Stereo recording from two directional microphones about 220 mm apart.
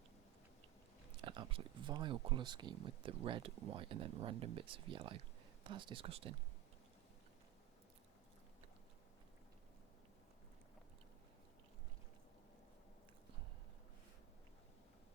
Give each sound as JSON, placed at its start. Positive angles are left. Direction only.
{"t": 1.2, "sound": "speech", "side_deg": -20}